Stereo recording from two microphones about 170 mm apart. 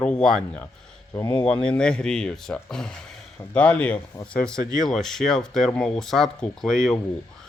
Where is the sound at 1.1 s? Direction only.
20° left (ahead or behind).